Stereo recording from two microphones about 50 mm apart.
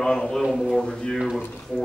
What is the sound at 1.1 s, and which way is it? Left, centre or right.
Speech, centre.